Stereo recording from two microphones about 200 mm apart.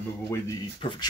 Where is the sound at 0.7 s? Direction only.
25° left (ahead or behind).